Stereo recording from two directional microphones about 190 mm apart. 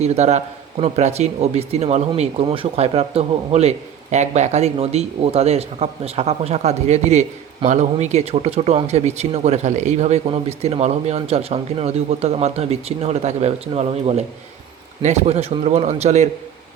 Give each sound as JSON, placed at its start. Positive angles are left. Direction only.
{"t": 0.0, "sound": "a man's voice", "side_deg": -35}